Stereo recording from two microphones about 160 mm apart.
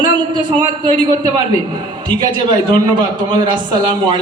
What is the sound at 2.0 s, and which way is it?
A man's voice, 30° right (ahead or behind).